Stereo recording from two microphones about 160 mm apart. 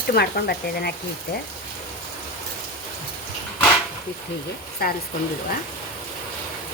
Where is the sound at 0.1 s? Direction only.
80° left.